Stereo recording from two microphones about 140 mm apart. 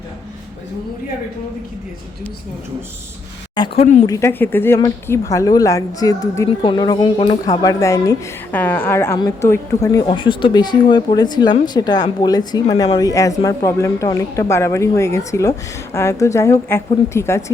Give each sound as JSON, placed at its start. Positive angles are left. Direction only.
{"t": 3.8, "sound": "speech", "side_deg": 55}
{"t": 4.0, "sound": "speech", "side_deg": 20}
{"t": 7.4, "sound": "speech", "side_deg": 25}
{"t": 9.1, "sound": "speech", "side_deg": 30}
{"t": 10.1, "sound": "speech", "side_deg": 35}